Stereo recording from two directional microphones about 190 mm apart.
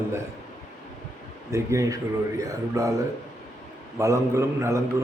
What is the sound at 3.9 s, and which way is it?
Speech, 15° right (ahead or behind).